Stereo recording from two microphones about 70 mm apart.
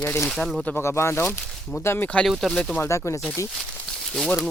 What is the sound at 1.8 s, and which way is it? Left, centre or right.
Speech, left.